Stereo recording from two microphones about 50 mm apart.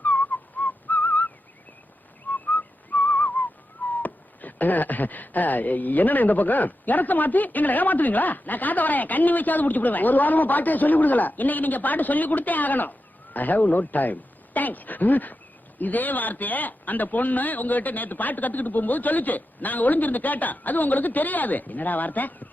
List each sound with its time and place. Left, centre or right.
0.0 s whistling: left
13.3 s speech: left